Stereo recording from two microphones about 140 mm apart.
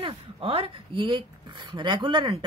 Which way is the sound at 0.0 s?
40° right (ahead or behind).